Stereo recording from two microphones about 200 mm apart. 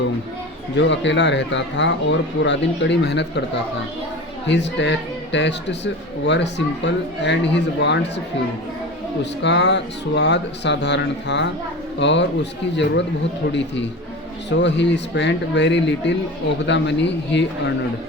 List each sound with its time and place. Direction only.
0.8 s speech: 65° left (ahead or behind)
4.4 s speech: 60° left (ahead or behind)
9.4 s speech: 60° left (ahead or behind)
14.5 s speech: 60° left (ahead or behind)